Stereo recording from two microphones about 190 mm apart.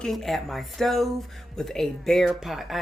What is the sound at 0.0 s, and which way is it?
Speech, centre (ahead or behind).